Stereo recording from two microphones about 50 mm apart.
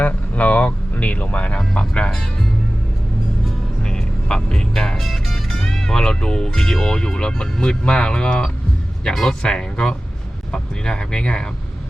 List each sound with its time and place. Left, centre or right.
0.0 s speech: left
3.8 s vehicle: centre
4.9 s speech: centre
6.6 s speech: centre